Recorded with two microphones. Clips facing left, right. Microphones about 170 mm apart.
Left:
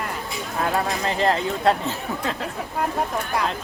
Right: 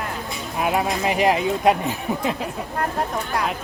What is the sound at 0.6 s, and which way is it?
Speech, 15° right (ahead or behind).